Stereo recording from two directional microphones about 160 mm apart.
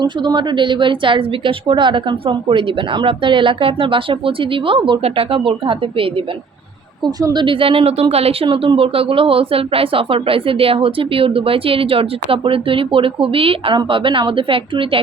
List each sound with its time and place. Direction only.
0.0 s a woman's voice: 30° right (ahead or behind)